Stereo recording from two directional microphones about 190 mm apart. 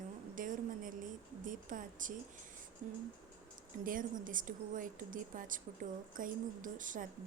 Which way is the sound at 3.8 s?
45° right (ahead or behind).